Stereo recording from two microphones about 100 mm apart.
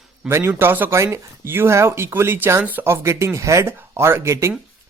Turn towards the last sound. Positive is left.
turn(degrees=-25)  # may be behind; listen again after turning